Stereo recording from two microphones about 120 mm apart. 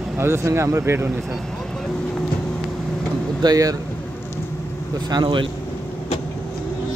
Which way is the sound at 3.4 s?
30° right (ahead or behind).